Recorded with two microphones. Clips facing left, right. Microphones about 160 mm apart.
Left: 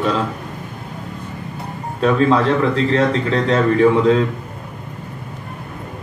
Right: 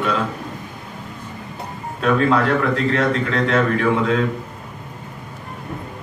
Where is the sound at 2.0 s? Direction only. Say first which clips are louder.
Left 2 dB; 30° left (ahead or behind).